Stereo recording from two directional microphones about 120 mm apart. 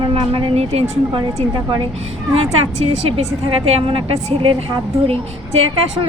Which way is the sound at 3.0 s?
55° right (ahead or behind).